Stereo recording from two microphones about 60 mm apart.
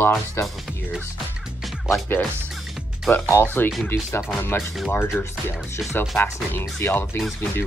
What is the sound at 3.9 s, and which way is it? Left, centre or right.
Speech, left.